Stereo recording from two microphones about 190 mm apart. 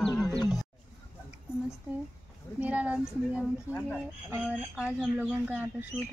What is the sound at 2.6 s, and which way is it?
Speech, 5° right (ahead or behind).